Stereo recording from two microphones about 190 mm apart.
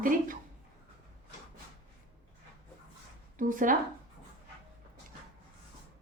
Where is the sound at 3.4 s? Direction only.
45° right (ahead or behind).